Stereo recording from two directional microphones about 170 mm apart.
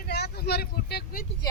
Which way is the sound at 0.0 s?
70° left (ahead or behind).